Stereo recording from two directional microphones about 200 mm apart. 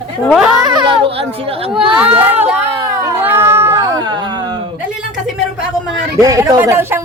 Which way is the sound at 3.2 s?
10° right (ahead or behind).